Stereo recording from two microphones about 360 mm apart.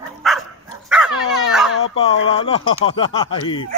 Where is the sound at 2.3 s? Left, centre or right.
Centre.